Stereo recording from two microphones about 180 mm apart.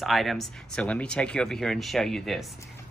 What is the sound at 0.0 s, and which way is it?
Speech, centre (ahead or behind).